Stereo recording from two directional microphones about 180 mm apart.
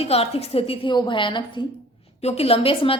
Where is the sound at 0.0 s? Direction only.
35° left (ahead or behind).